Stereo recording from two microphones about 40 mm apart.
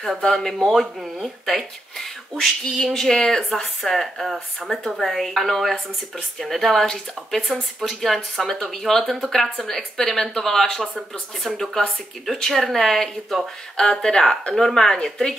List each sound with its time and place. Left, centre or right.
0.3 s speech: centre
3.5 s speech: centre